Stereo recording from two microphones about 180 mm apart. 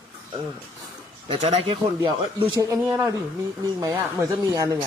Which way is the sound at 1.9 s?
20° right (ahead or behind).